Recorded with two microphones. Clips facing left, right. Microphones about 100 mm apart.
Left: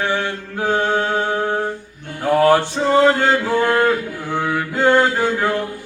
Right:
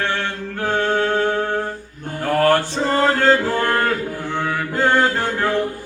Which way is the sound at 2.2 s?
10° left (ahead or behind).